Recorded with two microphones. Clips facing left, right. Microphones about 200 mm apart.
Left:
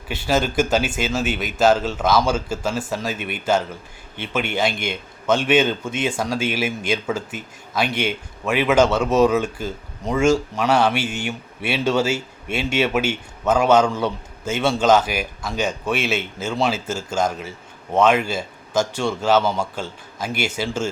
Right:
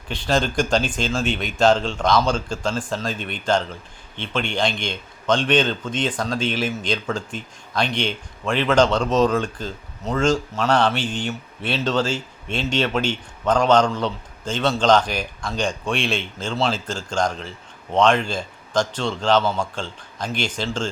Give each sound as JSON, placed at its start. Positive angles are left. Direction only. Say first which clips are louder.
{"t": 0.1, "sound": "a man's voice", "louder": "left 1 dB", "side_deg": 5}